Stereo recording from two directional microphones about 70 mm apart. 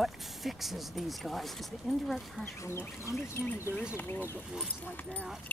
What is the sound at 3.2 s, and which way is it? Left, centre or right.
Speech, left.